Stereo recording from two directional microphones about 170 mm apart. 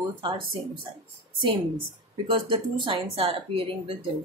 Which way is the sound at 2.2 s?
30° right (ahead or behind).